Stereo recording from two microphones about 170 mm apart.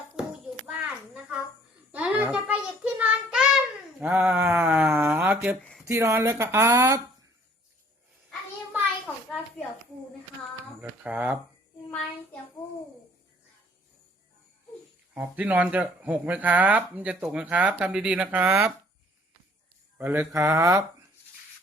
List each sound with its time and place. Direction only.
0.2 s a sound: 5° right (ahead or behind)
1.9 s child singing: 10° right (ahead or behind)
4.0 s a sound: 10° right (ahead or behind)
5.9 s speech: 15° right (ahead or behind)
10.8 s speech: 10° right (ahead or behind)
15.1 s speech: 10° right (ahead or behind)
20.0 s speech: 15° right (ahead or behind)